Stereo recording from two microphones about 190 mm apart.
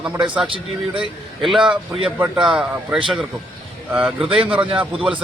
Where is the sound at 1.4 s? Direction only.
Centre (ahead or behind).